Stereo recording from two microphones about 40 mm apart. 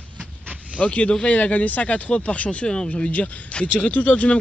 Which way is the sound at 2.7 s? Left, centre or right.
Left.